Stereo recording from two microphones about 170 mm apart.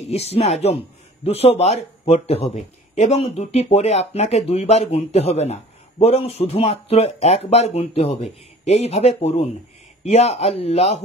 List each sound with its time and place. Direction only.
0.0 s speech: 40° left (ahead or behind)